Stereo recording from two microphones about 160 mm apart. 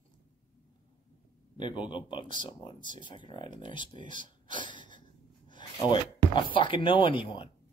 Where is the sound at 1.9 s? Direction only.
30° left (ahead or behind).